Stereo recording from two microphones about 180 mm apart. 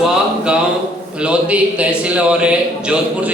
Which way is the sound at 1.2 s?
5° right (ahead or behind).